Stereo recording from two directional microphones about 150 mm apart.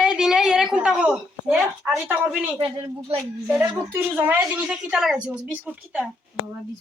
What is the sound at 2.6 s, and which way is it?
Speech, 35° right (ahead or behind).